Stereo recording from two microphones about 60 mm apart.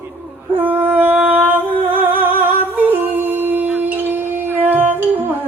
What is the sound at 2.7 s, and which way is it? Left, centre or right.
Humming, right.